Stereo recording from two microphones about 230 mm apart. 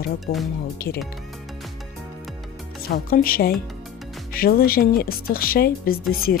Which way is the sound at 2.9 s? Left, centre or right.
Left.